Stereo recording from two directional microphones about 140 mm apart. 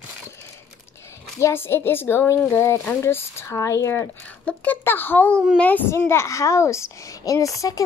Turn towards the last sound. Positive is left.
turn(degrees=25)  # may be behind; listen again after turning